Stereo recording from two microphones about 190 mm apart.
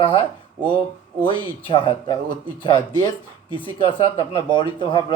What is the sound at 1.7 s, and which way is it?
Speech, 25° left (ahead or behind).